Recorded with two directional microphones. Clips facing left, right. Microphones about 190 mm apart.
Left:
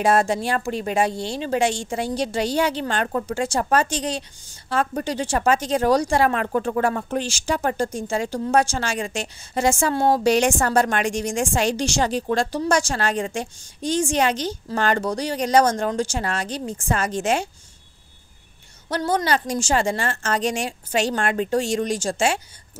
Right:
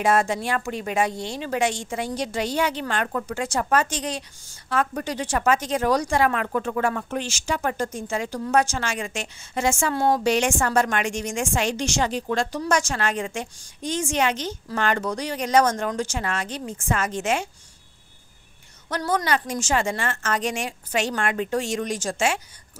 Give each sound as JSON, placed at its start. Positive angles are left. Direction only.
{"t": 0.0, "sound": "speech", "side_deg": 35}
{"t": 18.9, "sound": "speech", "side_deg": 30}